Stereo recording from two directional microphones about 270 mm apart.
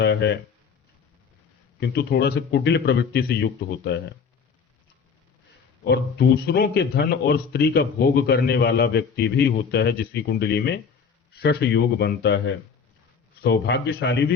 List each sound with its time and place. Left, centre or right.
0.0 s speech: left
1.8 s a man's voice: left
5.8 s a man's voice: left